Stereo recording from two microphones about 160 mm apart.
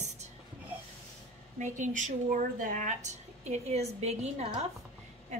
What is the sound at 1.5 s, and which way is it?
Speech, 50° right (ahead or behind).